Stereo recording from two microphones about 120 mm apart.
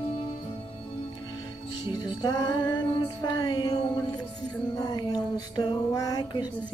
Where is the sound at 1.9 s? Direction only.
35° left (ahead or behind).